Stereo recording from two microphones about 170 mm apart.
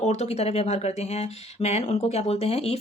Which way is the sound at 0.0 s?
40° left (ahead or behind).